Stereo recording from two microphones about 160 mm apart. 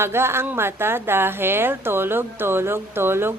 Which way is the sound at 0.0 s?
15° right (ahead or behind).